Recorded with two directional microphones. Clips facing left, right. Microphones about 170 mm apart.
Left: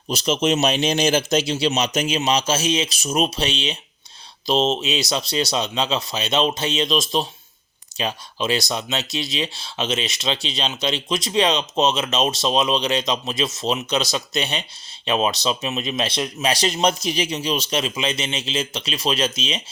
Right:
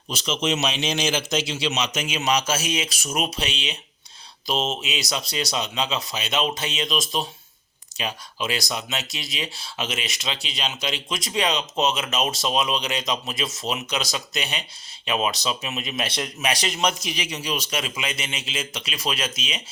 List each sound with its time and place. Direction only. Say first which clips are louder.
0.1 s a man's voice: left 5 dB; 40° left (ahead or behind)